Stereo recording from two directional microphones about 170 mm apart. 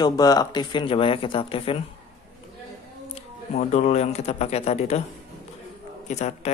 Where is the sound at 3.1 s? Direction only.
40° left (ahead or behind).